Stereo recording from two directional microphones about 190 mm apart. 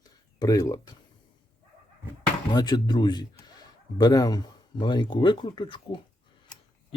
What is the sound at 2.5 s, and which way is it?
Speech, 20° left (ahead or behind).